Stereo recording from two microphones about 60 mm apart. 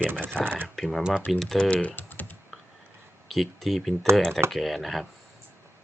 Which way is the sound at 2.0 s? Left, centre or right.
Left.